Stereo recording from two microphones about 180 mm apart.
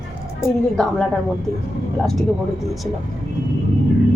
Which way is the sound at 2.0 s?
Centre (ahead or behind).